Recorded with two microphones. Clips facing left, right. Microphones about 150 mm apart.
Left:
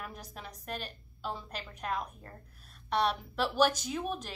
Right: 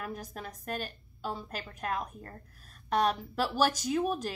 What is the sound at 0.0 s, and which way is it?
A woman's voice, 50° right (ahead or behind).